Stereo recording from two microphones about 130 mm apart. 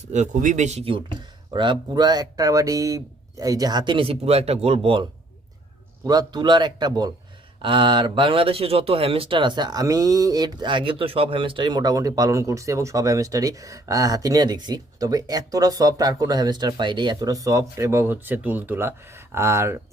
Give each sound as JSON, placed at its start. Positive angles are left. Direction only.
{"t": 0.1, "sound": "speech", "side_deg": -65}
{"t": 1.5, "sound": "speech", "side_deg": -35}
{"t": 6.1, "sound": "speech", "side_deg": -30}